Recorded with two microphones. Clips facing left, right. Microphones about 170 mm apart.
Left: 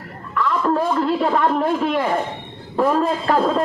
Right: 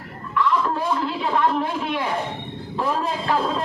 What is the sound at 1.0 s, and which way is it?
A man's voice, 45° left (ahead or behind).